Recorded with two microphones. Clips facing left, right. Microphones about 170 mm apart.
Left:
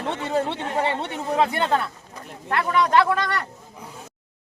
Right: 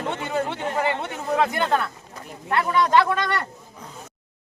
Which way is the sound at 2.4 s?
30° right (ahead or behind).